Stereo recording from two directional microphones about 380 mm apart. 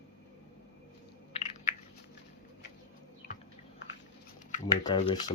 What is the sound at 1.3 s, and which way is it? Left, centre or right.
Chewing, centre.